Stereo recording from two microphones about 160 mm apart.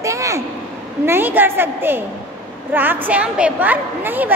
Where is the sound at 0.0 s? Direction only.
20° right (ahead or behind).